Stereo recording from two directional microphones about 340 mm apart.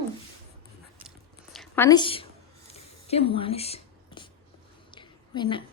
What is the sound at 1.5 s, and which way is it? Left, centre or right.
Speech, centre.